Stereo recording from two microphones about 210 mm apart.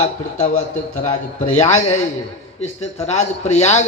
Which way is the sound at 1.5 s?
30° left (ahead or behind).